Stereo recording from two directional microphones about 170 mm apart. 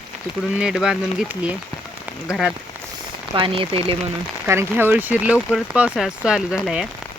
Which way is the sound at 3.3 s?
30° right (ahead or behind).